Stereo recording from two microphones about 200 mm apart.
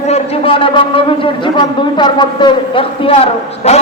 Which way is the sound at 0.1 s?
25° left (ahead or behind).